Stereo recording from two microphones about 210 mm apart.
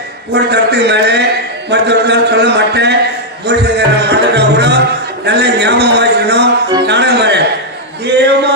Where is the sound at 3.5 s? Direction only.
55° right (ahead or behind).